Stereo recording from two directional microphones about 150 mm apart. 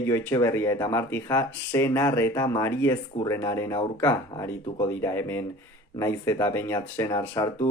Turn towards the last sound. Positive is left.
turn(degrees=20)  # may be behind; listen again after turning